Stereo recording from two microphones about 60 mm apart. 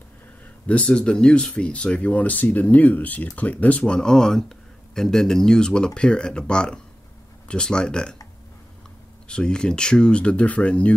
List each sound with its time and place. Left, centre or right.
0.7 s speech: centre
3.9 s speech: centre
9.3 s speech: centre